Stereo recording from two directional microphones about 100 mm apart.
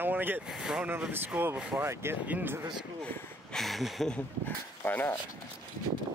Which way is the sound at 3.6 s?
Centre (ahead or behind).